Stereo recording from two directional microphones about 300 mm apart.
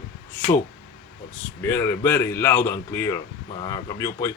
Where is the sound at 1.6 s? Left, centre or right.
Centre.